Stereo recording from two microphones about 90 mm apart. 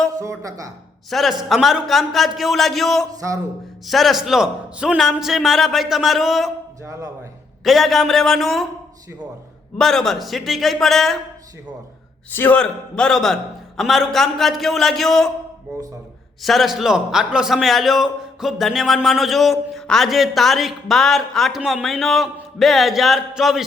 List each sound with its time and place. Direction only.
0.1 s speech: 40° right (ahead or behind)
1.1 s a man's voice: centre (ahead or behind)
7.6 s a man's voice: centre (ahead or behind)
9.7 s a man's voice: 5° left (ahead or behind)
12.3 s a man's voice: 25° left (ahead or behind)
12.5 s a man's voice: 10° left (ahead or behind)
16.4 s a man's voice: centre (ahead or behind)